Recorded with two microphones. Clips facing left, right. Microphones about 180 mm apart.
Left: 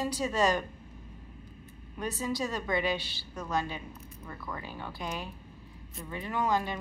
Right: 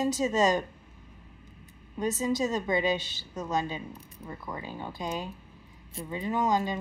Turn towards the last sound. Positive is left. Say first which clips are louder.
# right 3 dB
turn(degrees=-20)  # may be behind; listen again after turning